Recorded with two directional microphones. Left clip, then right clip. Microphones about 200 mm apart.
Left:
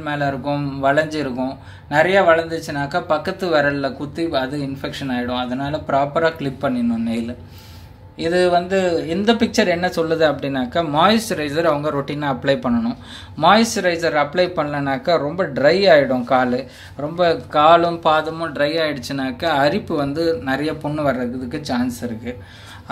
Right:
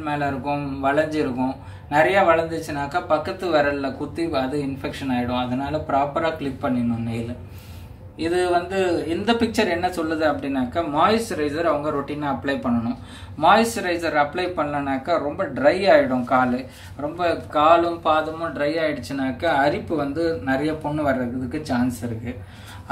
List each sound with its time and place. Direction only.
0.0 s speech: 50° left (ahead or behind)
8.2 s speech: 50° left (ahead or behind)